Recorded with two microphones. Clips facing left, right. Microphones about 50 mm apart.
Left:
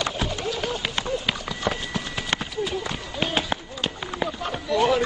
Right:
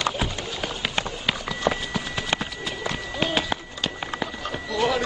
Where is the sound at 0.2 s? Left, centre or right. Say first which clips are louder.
Left 2 dB; centre.